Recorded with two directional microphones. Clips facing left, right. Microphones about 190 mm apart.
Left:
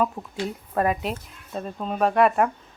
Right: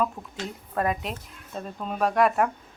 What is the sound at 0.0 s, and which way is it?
Speech, 5° left (ahead or behind).